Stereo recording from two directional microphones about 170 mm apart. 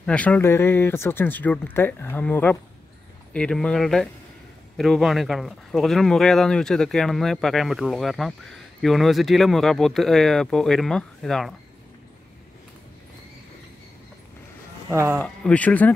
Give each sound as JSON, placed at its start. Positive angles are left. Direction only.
{"t": 0.0, "sound": "speech", "side_deg": 5}
{"t": 14.9, "sound": "speech", "side_deg": -15}
{"t": 15.1, "sound": "speech", "side_deg": 5}